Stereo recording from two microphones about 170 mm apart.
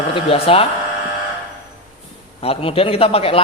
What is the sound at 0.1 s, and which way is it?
Speech, 30° left (ahead or behind).